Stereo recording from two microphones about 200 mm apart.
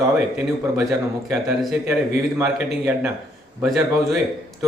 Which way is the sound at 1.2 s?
5° right (ahead or behind).